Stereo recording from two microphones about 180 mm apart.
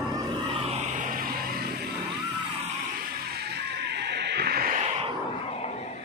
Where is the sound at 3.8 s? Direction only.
70° right (ahead or behind); by 4.8 s 55° right (ahead or behind).